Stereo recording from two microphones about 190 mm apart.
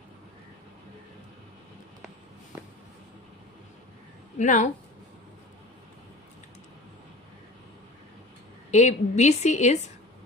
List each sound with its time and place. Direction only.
4.4 s speech: 40° left (ahead or behind)
8.7 s a woman's voice: 40° left (ahead or behind)